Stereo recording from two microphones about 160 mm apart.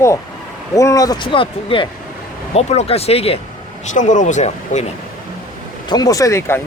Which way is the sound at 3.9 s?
50° left (ahead or behind).